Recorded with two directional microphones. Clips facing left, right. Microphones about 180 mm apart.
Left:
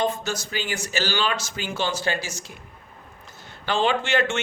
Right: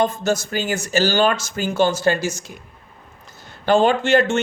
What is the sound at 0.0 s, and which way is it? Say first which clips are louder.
A man's voice: right 6 dB; 50° right (ahead or behind).